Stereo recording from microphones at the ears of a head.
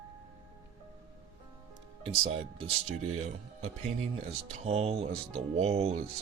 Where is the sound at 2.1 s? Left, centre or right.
Right.